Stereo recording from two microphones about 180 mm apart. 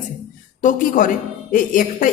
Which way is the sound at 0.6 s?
50° left (ahead or behind).